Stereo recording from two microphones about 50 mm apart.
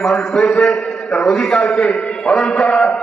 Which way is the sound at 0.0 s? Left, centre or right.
Centre.